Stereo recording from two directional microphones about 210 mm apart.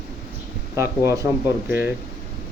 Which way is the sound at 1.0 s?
15° right (ahead or behind).